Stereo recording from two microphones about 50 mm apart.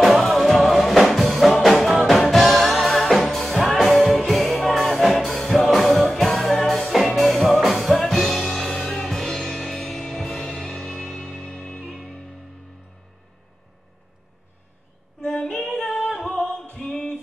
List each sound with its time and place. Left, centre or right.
0.2 s music: centre
15.2 s female singing: centre
15.5 s singing: centre
16.7 s a sound: centre